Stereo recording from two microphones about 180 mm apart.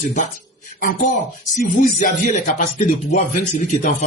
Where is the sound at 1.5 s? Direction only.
45° left (ahead or behind).